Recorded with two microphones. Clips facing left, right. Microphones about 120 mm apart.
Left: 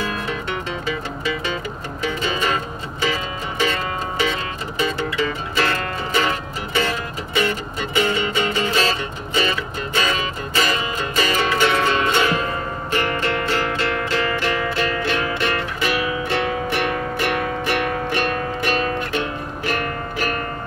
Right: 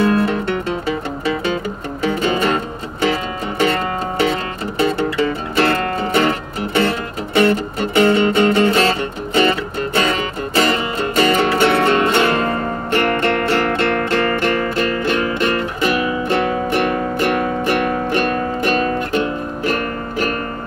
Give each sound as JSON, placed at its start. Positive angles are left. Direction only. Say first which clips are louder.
{"t": 0.8, "sound": "music", "louder": "right 5 dB", "side_deg": -60}